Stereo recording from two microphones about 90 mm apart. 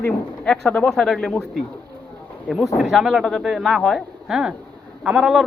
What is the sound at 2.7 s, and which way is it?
Speech, 5° right (ahead or behind).